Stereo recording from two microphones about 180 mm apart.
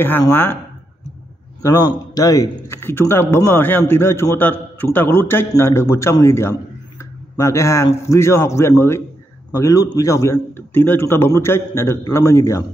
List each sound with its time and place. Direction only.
0.0 s a man's voice: 10° left (ahead or behind)
1.6 s a man's voice: 20° left (ahead or behind)